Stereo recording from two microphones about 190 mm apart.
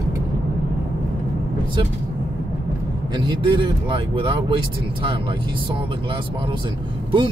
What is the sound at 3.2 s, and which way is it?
Speech, 25° right (ahead or behind).